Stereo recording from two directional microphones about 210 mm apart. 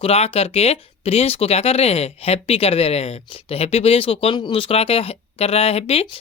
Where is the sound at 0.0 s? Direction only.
30° left (ahead or behind).